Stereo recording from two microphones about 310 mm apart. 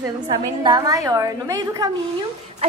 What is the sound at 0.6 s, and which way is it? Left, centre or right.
A woman's voice, centre.